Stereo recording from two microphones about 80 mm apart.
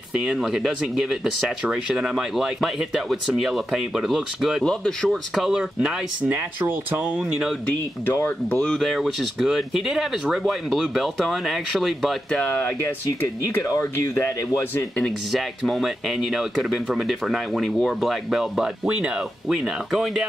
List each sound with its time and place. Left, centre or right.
0.2 s speech: centre
4.6 s speech: centre
5.3 s speech: centre
8.5 s speech: centre
8.7 s speech: centre
12.4 s speech: left
12.8 s speech: left
15.3 s speech: centre